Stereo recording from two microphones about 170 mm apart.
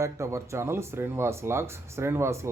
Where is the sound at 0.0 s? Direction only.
15° right (ahead or behind).